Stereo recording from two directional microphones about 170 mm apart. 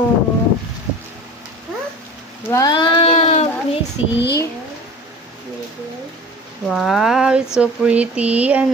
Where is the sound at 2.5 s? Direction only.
25° left (ahead or behind); by 3.4 s 40° left (ahead or behind).